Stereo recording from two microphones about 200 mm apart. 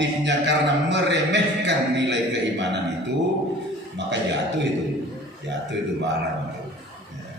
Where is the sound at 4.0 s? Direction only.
60° right (ahead or behind).